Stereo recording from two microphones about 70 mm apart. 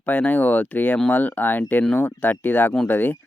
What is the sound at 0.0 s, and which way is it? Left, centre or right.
Speech, left.